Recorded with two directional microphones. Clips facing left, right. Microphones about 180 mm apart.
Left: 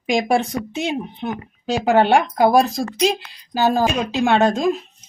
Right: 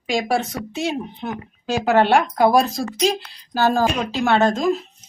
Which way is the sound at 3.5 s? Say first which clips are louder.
Left 1 dB; 15° left (ahead or behind).